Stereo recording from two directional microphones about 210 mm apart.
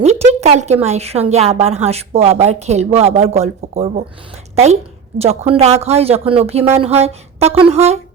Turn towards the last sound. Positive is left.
turn(degrees=-30)  # may be behind; listen again after turning